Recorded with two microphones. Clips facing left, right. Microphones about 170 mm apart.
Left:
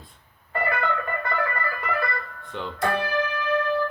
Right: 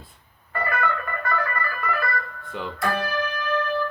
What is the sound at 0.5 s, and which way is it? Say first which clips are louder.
Music: even; 25° left (ahead or behind).